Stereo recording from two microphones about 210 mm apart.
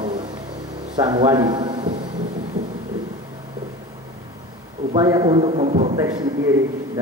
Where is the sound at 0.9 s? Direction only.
20° right (ahead or behind).